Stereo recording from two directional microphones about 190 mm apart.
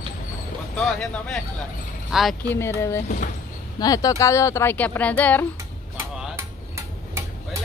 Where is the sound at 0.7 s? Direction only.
5° left (ahead or behind).